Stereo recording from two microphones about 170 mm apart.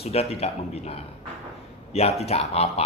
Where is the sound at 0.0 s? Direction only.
35° left (ahead or behind).